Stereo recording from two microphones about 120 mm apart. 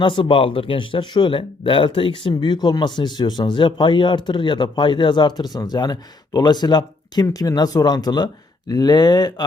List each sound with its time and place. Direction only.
0.0 s speech: 45° left (ahead or behind)